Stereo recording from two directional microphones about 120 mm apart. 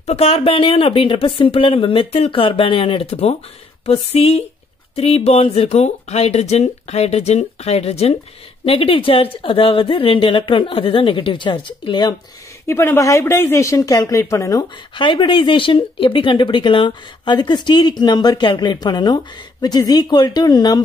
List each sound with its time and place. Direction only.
0.0 s a woman's voice: 55° left (ahead or behind); by 12.2 s 35° left (ahead or behind)
12.6 s speech: 20° left (ahead or behind)
15.0 s speech: 40° left (ahead or behind)